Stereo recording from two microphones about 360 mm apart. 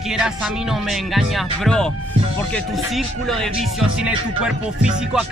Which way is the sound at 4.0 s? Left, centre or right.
Centre.